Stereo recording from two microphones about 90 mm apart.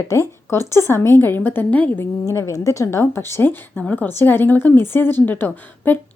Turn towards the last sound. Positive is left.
turn(degrees=20)  # may be behind; listen again after turning